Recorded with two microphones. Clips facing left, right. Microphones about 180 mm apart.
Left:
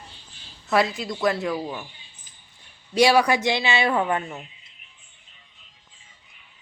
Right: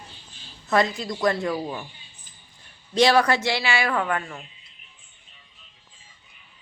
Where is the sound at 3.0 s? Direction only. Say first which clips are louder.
Left 1 dB; 10° left (ahead or behind).